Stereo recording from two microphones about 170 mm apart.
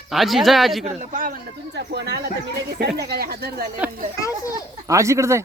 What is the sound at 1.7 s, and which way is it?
Speech, 85° right.